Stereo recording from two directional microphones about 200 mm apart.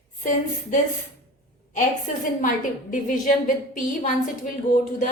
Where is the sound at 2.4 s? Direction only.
40° left (ahead or behind).